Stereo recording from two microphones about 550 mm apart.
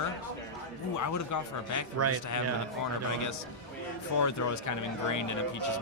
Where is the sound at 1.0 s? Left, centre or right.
Left.